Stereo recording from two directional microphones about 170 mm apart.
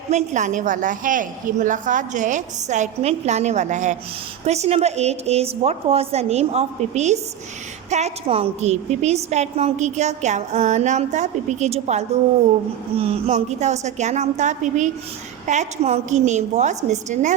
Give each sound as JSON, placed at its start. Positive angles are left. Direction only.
{"t": 0.1, "sound": "a woman's voice", "side_deg": -40}